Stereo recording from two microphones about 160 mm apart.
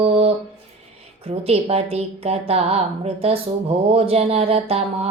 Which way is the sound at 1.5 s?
40° right (ahead or behind).